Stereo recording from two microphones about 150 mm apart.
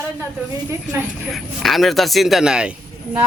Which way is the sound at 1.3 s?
Centre (ahead or behind).